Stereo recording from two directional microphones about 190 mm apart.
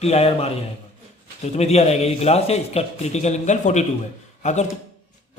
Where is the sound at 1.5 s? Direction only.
35° left (ahead or behind).